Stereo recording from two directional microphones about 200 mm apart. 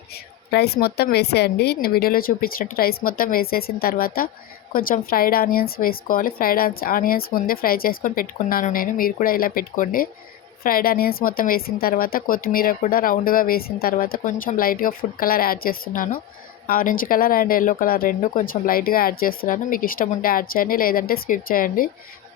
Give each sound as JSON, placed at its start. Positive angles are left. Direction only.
{"t": 0.1, "sound": "a woman's voice", "side_deg": 55}